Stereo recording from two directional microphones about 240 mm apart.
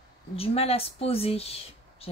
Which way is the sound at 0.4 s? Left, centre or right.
Left.